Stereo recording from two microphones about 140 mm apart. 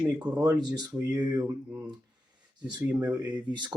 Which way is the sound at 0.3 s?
30° right (ahead or behind).